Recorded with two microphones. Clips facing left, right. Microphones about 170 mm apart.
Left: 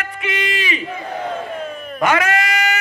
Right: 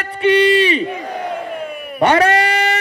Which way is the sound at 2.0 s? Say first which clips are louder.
Right 5 dB; 35° right (ahead or behind).